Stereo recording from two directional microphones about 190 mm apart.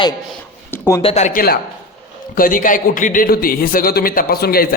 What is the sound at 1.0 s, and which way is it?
A man's voice, 35° left (ahead or behind).